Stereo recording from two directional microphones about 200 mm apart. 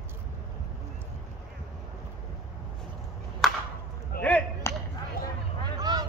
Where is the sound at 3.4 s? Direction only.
Centre (ahead or behind).